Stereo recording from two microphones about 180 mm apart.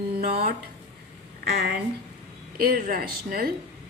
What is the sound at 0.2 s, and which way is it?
Speech, 60° right (ahead or behind).